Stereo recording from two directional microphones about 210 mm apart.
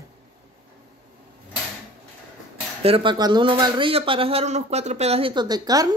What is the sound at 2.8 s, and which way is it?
Speech, 25° right (ahead or behind).